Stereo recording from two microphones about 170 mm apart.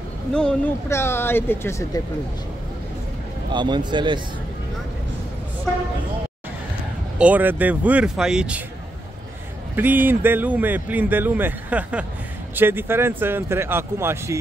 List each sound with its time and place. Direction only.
0.3 s speech: 5° left (ahead or behind)
3.5 s a man's voice: 25° right (ahead or behind)
7.2 s speech: 10° right (ahead or behind)
9.8 s speech: 10° right (ahead or behind)